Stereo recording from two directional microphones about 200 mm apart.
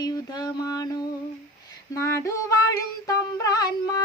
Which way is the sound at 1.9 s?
15° left (ahead or behind).